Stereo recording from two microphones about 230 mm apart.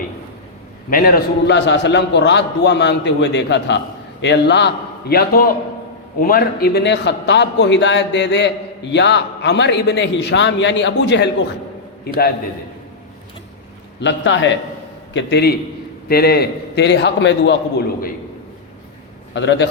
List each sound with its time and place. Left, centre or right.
0.9 s a man's voice: left
14.0 s a man's voice: left
19.3 s a man's voice: left